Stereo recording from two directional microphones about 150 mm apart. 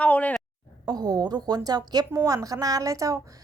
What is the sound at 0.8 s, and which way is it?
A woman's voice, 25° right (ahead or behind).